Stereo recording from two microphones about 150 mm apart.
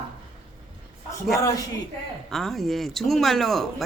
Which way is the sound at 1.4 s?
25° left (ahead or behind).